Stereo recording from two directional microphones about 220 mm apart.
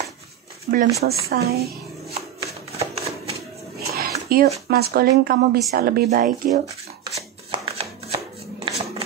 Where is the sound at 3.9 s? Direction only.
45° right (ahead or behind).